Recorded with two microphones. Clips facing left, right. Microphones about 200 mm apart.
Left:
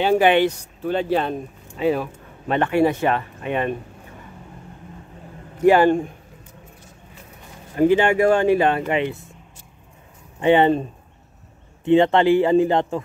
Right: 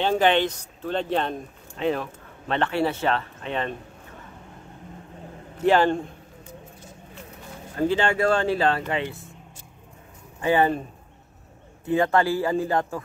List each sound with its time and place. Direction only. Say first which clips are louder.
0.0 s speech: left 4 dB; 10° left (ahead or behind)
5.6 s speech: left 5 dB; 10° left (ahead or behind)
7.7 s speech: left 6 dB; 15° left (ahead or behind)
10.4 s speech: left 5 dB; 25° left (ahead or behind)
11.9 s speech: left 7 dB; 20° left (ahead or behind)